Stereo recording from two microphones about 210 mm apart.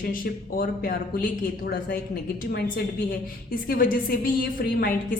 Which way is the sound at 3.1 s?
40° left (ahead or behind).